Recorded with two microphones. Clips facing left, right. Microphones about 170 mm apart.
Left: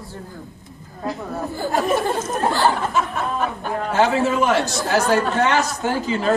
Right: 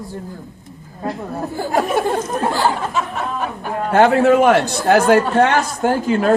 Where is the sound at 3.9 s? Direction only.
60° right (ahead or behind).